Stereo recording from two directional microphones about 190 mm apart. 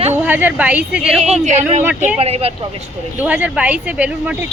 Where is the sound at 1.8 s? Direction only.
5° right (ahead or behind).